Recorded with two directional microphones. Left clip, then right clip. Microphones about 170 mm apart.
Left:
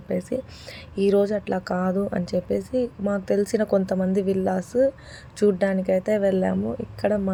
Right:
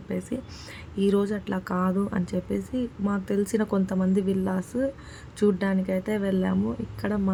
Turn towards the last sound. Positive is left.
turn(degrees=15)  # may be behind; listen again after turning